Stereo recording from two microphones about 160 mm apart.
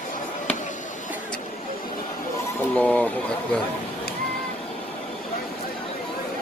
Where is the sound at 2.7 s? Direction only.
10° left (ahead or behind).